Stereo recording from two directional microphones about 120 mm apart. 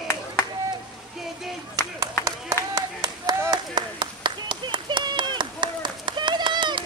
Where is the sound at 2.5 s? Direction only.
25° right (ahead or behind).